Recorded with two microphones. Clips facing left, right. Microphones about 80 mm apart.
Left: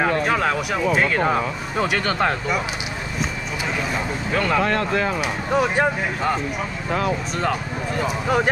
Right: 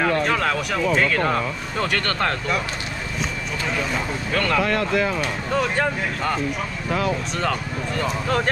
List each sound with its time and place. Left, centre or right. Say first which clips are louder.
0.0 s speech: left 1 dB; centre
3.9 s speech: left 1 dB; centre
4.7 s speech: even; left
5.5 s speech: left 3 dB; centre
7.3 s speech: left 1 dB; centre